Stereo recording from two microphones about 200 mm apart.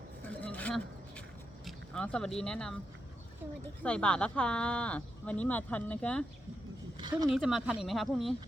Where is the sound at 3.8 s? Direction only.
5° left (ahead or behind).